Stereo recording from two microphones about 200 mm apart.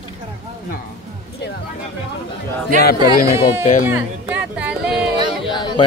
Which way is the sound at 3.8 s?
5° right (ahead or behind).